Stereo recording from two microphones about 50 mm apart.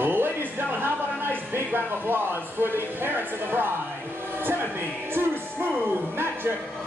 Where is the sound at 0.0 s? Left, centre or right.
Right.